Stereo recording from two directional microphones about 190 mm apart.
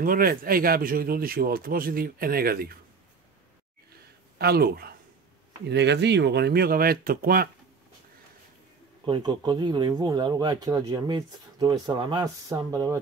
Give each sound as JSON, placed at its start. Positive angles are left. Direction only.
{"t": 0.0, "sound": "speech", "side_deg": -50}
{"t": 4.4, "sound": "speech", "side_deg": -55}
{"t": 9.0, "sound": "speech", "side_deg": -25}